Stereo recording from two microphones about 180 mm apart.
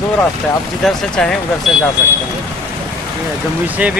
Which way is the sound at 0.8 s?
5° left (ahead or behind).